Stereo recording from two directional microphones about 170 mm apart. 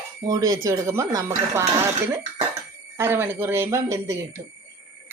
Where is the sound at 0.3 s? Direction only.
20° right (ahead or behind).